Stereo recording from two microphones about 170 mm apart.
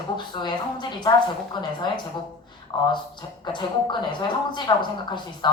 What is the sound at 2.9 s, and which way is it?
Speech, 25° left (ahead or behind).